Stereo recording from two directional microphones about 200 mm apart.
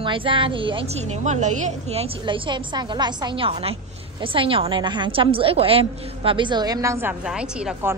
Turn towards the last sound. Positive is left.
turn(degrees=-10)  # may be behind; listen again after turning